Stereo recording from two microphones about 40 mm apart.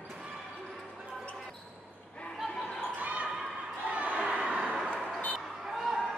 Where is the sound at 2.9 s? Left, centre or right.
Right.